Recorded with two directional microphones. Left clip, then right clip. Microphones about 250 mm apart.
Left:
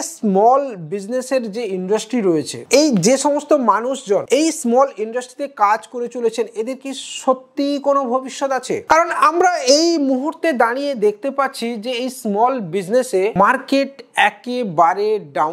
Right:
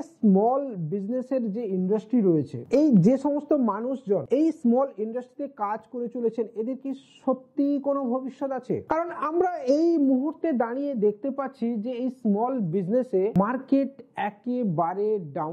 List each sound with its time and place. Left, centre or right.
0.2 s a woman's voice: centre
3.5 s a woman's voice: centre
7.8 s a woman's voice: centre
8.4 s a woman's voice: centre